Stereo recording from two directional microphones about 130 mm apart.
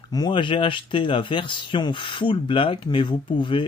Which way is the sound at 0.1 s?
35° left (ahead or behind).